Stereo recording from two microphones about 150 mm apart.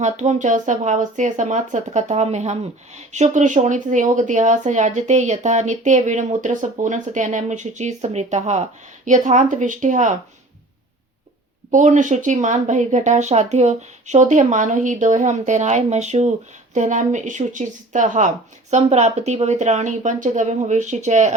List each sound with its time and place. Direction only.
0.0 s speech: 50° right (ahead or behind)
11.7 s speech: 55° right (ahead or behind)